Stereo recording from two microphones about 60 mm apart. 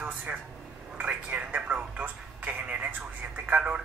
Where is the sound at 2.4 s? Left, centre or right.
Centre.